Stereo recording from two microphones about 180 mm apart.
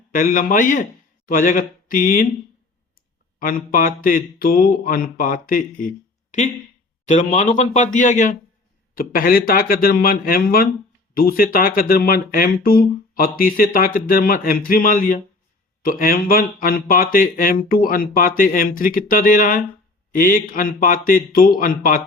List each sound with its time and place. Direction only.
0.1 s speech: 50° left (ahead or behind)
3.3 s speech: 50° left (ahead or behind)